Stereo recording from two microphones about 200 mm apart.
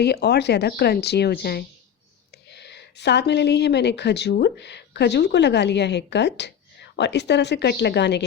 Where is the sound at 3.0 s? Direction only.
55° left (ahead or behind).